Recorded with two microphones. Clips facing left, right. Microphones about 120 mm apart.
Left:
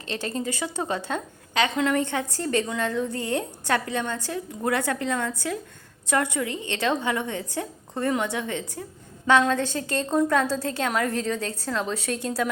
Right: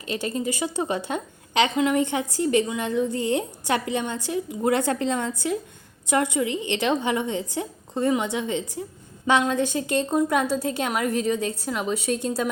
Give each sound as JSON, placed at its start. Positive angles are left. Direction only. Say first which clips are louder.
{"t": 0.0, "sound": "a woman's voice", "louder": "right 2 dB", "side_deg": -10}